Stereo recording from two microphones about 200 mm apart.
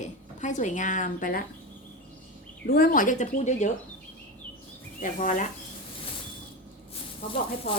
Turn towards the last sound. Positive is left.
turn(degrees=30)  # may be behind; listen again after turning